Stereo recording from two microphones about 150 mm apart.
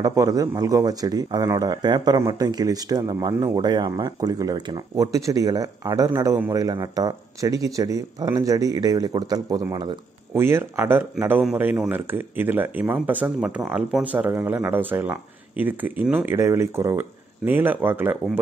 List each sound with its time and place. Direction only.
0.0 s a man's voice: 25° right (ahead or behind)